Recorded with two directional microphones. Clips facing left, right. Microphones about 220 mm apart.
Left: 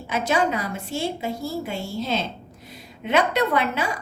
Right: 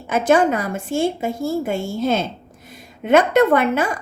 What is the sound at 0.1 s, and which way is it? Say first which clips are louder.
A woman's voice: right 7 dB; 50° right (ahead or behind).